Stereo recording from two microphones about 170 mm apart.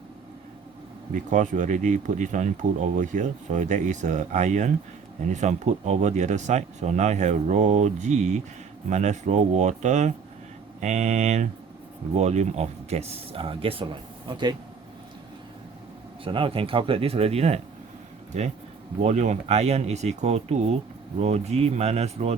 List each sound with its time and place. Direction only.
1.1 s speech: 50° right (ahead or behind); by 14.5 s 30° right (ahead or behind)
16.2 s speech: 30° right (ahead or behind)
19.0 s speech: 40° right (ahead or behind)